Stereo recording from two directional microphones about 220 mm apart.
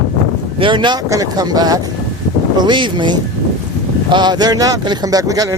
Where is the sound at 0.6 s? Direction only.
20° right (ahead or behind).